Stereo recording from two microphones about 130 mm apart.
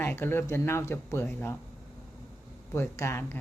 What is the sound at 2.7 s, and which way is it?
Speech, 20° left (ahead or behind).